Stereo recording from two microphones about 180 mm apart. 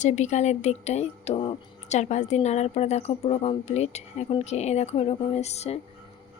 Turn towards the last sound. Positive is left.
turn(degrees=35)  # may be behind; listen again after turning